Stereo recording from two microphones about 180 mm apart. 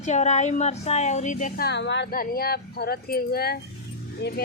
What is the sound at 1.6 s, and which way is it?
Speech, 75° left (ahead or behind).